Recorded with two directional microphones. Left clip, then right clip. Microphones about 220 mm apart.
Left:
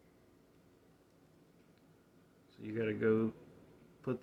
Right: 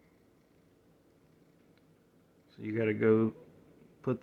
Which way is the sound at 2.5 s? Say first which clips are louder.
Right 6 dB; 40° right (ahead or behind).